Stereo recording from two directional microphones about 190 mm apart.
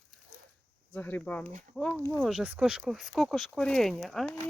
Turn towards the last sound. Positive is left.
turn(degrees=5)  # may be behind; listen again after turning